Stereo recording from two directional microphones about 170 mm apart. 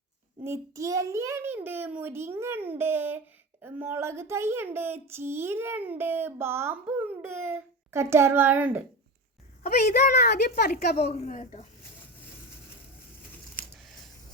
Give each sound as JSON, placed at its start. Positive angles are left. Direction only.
{"t": 0.4, "sound": "a child's voice", "side_deg": -15}
{"t": 9.8, "sound": "a child's voice", "side_deg": 75}
{"t": 11.0, "sound": "a woman's voice", "side_deg": 45}